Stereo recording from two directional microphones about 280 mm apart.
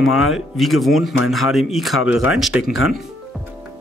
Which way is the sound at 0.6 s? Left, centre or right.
Centre.